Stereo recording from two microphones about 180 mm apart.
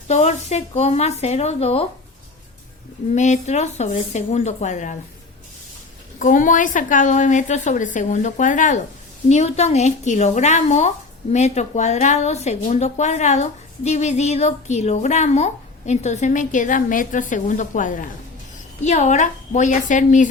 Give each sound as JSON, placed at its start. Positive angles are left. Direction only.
{"t": 0.1, "sound": "speech", "side_deg": 40}
{"t": 3.2, "sound": "speech", "side_deg": 40}
{"t": 6.1, "sound": "a woman's voice", "side_deg": 45}